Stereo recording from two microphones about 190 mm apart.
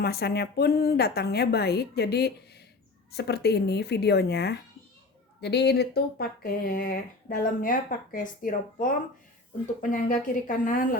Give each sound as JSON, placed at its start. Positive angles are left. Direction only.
{"t": 0.0, "sound": "a woman's voice", "side_deg": 55}
{"t": 9.9, "sound": "speech", "side_deg": 45}